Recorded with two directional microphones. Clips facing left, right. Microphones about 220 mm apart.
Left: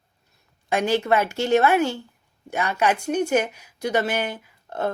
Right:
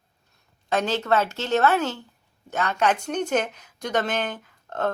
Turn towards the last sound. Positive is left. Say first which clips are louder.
# even
turn(degrees=10)  # may be behind; listen again after turning